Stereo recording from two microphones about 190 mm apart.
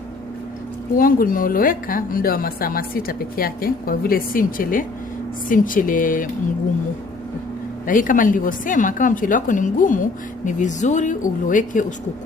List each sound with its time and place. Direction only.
0.9 s a woman's voice: 50° left (ahead or behind)
7.9 s a woman's voice: 45° left (ahead or behind)